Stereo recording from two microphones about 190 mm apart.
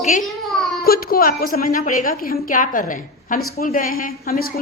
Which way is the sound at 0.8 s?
50° left (ahead or behind).